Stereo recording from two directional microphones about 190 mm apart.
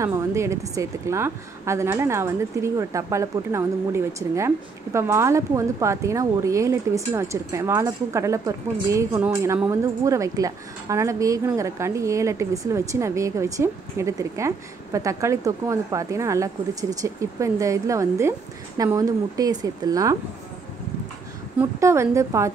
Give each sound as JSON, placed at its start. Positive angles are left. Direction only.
{"t": 0.0, "sound": "a woman's voice", "side_deg": -15}
{"t": 21.5, "sound": "a woman's voice", "side_deg": -15}